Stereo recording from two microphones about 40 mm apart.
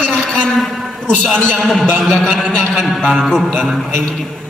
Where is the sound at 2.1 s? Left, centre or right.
Left.